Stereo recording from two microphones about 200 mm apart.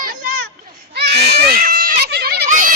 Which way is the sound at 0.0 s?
45° right (ahead or behind).